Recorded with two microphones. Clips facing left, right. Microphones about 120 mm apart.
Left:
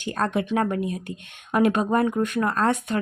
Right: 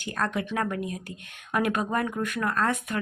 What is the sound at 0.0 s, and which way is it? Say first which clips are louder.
Speech: left 4 dB; 25° left (ahead or behind).